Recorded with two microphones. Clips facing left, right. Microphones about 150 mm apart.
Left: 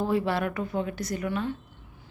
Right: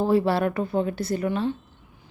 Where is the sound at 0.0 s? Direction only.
35° right (ahead or behind).